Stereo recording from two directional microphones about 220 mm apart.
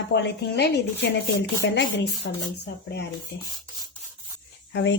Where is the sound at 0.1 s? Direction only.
50° left (ahead or behind).